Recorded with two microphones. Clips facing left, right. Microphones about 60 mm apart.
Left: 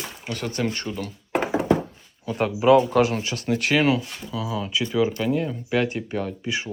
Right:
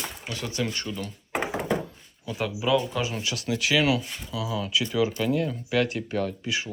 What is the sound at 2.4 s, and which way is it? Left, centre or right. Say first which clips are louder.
Speech: left 8 dB; left.